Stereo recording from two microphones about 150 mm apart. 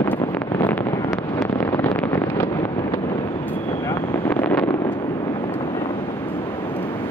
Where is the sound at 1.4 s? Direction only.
15° left (ahead or behind).